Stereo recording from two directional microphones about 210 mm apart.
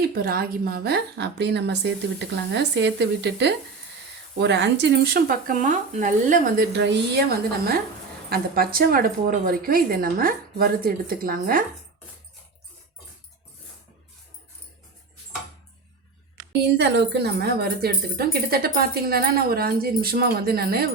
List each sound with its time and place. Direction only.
0.1 s speech: 45° right (ahead or behind)
6.7 s speech: 55° right (ahead or behind)
16.5 s speech: 55° right (ahead or behind)